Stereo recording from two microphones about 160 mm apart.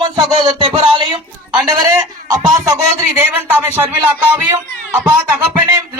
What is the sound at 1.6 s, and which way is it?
Speech, 20° right (ahead or behind).